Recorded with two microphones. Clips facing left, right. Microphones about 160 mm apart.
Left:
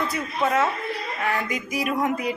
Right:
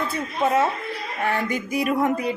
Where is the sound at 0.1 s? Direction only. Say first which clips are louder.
Right 2 dB; 30° right (ahead or behind).